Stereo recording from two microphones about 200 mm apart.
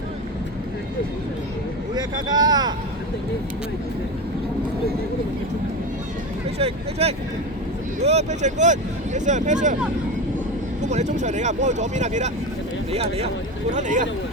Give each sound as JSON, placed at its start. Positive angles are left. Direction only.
{"t": 2.0, "sound": "speech", "side_deg": -20}
{"t": 6.6, "sound": "speech", "side_deg": -30}
{"t": 10.8, "sound": "speech", "side_deg": -35}